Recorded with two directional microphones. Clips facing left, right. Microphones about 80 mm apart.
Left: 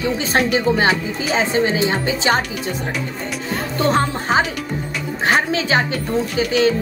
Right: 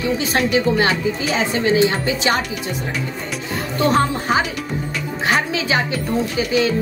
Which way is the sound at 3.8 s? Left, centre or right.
Left.